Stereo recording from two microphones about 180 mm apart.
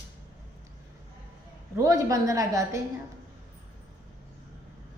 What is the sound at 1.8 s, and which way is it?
A woman's voice, 20° right (ahead or behind).